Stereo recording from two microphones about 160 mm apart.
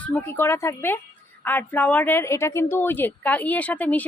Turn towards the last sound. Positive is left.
turn(degrees=10)  # may be behind; listen again after turning